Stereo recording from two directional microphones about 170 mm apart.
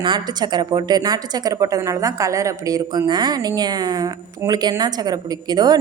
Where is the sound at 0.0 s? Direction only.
25° right (ahead or behind).